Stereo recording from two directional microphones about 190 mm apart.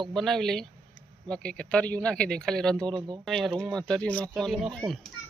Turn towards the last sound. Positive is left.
turn(degrees=0)  # may be behind; listen again after turning